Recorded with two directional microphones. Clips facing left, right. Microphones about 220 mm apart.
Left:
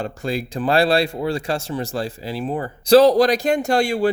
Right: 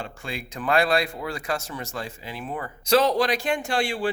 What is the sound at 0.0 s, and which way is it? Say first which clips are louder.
Speech: left 10 dB; 35° left (ahead or behind).